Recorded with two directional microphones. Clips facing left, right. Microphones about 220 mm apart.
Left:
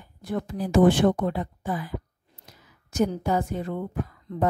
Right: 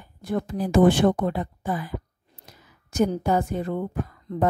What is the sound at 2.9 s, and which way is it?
Speech, 50° right (ahead or behind).